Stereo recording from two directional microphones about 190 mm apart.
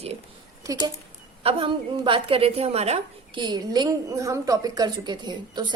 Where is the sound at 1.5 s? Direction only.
30° right (ahead or behind).